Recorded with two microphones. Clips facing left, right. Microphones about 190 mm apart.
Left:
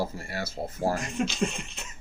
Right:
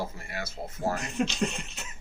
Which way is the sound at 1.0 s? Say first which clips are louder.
Even; centre (ahead or behind).